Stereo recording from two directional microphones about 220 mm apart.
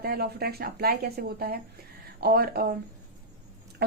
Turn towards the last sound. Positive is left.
turn(degrees=-50)  # may be behind; listen again after turning